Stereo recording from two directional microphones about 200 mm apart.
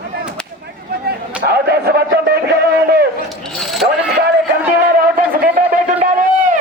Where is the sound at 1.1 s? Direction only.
55° right (ahead or behind).